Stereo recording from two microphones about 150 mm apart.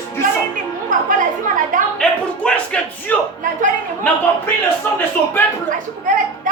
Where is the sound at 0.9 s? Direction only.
60° right (ahead or behind).